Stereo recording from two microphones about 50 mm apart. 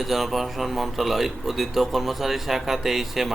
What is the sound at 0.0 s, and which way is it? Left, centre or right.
A man's voice, centre.